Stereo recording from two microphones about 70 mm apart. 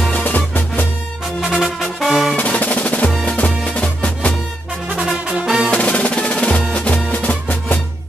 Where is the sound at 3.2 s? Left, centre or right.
Left.